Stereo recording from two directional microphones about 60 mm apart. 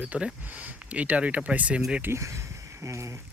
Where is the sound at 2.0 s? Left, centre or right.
Right.